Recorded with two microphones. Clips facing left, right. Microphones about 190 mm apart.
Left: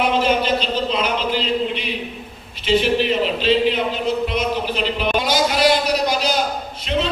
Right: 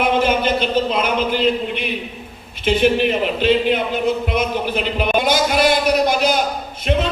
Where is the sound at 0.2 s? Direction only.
55° right (ahead or behind).